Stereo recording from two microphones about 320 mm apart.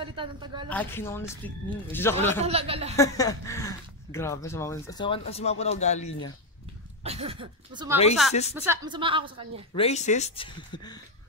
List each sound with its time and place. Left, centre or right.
0.0 s a woman's voice: centre
0.7 s speech: centre
2.4 s speech: centre
3.0 s speech: centre
7.0 s speech: centre
9.8 s speech: left